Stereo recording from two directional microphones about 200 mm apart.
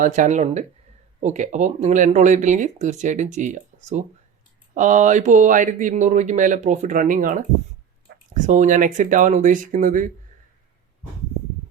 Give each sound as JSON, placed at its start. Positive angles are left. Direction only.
{"t": 0.0, "sound": "speech", "side_deg": -40}